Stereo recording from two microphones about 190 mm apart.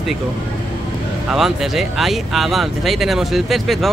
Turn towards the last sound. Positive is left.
turn(degrees=0)  # may be behind; listen again after turning